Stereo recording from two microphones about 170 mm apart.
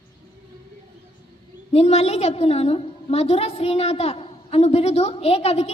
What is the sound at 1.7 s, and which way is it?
A woman's voice, 40° left (ahead or behind).